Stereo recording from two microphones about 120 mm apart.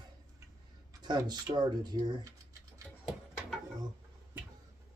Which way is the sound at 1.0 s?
35° right (ahead or behind).